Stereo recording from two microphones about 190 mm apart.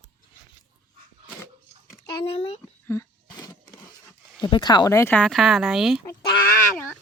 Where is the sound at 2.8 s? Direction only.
20° left (ahead or behind).